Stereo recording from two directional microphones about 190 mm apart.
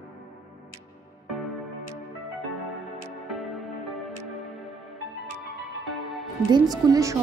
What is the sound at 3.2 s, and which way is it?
Music, centre (ahead or behind).